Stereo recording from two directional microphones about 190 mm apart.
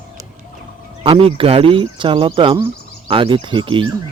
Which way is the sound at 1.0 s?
30° right (ahead or behind).